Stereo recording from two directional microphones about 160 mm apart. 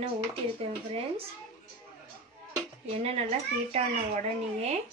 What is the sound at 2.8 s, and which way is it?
Speech, 40° right (ahead or behind).